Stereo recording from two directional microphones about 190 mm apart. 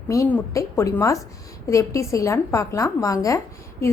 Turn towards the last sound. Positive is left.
turn(degrees=15)  # may be behind; listen again after turning